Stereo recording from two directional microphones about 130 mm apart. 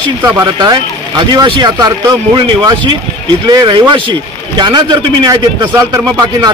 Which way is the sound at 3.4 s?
35° right (ahead or behind).